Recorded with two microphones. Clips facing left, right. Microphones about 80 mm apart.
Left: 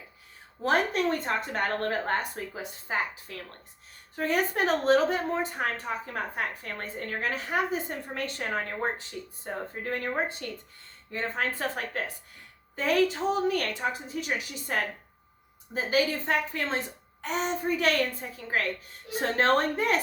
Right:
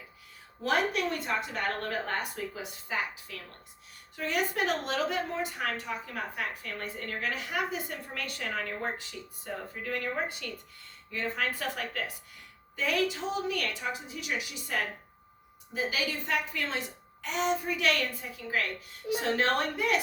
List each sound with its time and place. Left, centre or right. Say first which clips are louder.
0.6 s a woman's voice: left 3 dB; left